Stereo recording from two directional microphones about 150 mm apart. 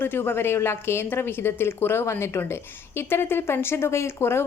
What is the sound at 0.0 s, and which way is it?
A woman's voice, 15° left (ahead or behind).